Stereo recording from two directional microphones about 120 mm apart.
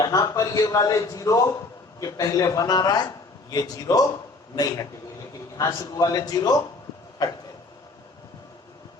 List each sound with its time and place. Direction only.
0.0 s a man's voice: 30° left (ahead or behind)